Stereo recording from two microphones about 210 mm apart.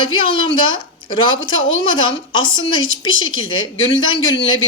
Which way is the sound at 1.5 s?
65° left (ahead or behind).